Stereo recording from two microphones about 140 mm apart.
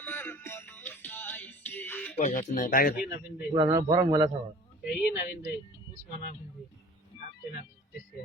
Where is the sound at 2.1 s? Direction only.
60° left (ahead or behind); by 3.1 s 90° left.